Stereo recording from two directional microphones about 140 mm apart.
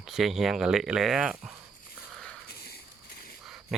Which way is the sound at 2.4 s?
90° left.